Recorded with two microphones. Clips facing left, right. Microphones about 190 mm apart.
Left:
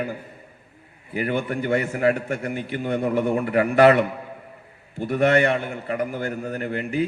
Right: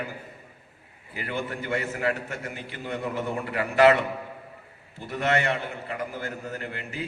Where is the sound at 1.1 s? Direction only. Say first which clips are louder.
Left 7 dB; 50° left (ahead or behind).